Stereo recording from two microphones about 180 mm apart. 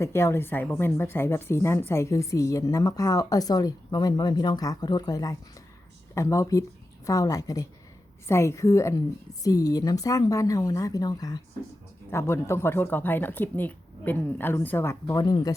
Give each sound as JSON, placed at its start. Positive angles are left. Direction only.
{"t": 0.0, "sound": "a woman's voice", "side_deg": 15}